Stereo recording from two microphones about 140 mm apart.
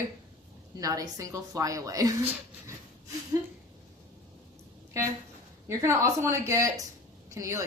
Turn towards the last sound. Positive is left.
turn(degrees=-20)  # may be behind; listen again after turning